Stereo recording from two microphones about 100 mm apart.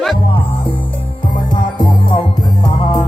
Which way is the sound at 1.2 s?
50° left (ahead or behind).